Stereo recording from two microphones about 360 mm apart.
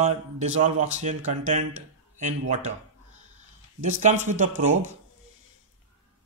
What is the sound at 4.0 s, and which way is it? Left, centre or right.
Speech, centre.